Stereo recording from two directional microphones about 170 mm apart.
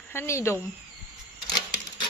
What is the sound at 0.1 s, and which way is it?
Speech, 15° left (ahead or behind).